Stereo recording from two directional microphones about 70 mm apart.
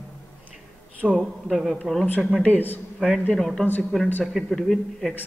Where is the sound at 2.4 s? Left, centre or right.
Left.